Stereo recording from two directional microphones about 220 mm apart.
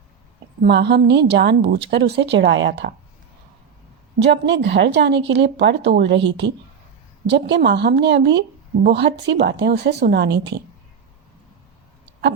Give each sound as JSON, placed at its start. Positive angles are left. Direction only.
{"t": 0.6, "sound": "a woman's voice", "side_deg": -50}
{"t": 4.2, "sound": "a woman's voice", "side_deg": -50}
{"t": 7.3, "sound": "a woman's voice", "side_deg": -50}